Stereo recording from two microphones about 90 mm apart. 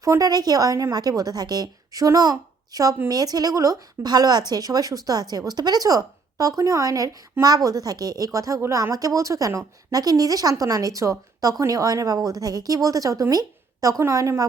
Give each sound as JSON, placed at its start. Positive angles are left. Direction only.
{"t": 0.0, "sound": "a woman's voice", "side_deg": -40}